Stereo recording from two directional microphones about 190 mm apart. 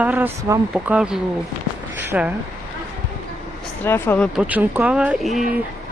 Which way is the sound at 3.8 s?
10° left (ahead or behind).